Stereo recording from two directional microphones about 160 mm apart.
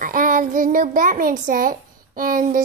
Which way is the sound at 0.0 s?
60° right (ahead or behind).